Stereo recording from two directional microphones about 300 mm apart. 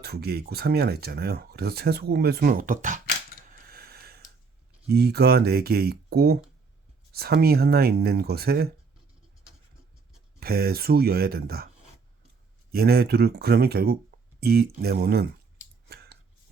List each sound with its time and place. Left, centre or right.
0.0 s speech: right
3.7 s snort: right
4.9 s speech: right
10.4 s speech: right
12.7 s speech: right